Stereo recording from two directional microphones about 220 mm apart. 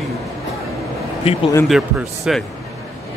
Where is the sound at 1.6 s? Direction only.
Centre (ahead or behind).